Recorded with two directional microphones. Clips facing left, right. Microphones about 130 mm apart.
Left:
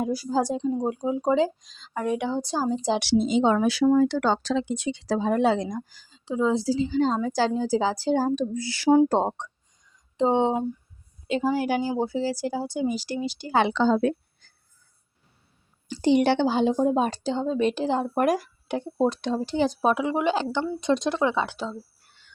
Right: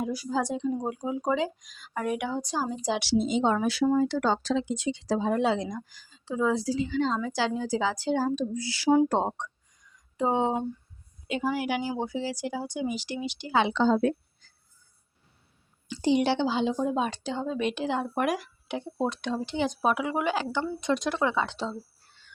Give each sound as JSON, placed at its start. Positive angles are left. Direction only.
{"t": 0.0, "sound": "speech", "side_deg": 35}
{"t": 3.0, "sound": "speech", "side_deg": 80}
{"t": 5.4, "sound": "a woman's voice", "side_deg": 50}
{"t": 6.1, "sound": "speech", "side_deg": 20}
{"t": 9.0, "sound": "a sound", "side_deg": 30}
{"t": 11.3, "sound": "speech", "side_deg": 30}
{"t": 13.6, "sound": "a woman's voice", "side_deg": 75}
{"t": 16.0, "sound": "speech", "side_deg": 60}
{"t": 21.5, "sound": "speech", "side_deg": 0}